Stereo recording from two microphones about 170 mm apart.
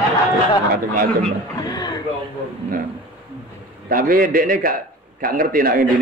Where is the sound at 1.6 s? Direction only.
25° left (ahead or behind).